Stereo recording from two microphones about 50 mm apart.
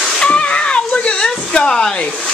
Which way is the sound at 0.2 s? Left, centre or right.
Left.